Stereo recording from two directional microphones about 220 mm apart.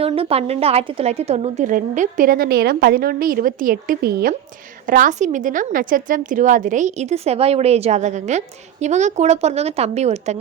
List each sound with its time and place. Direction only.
0.0 s a woman's voice: 25° right (ahead or behind)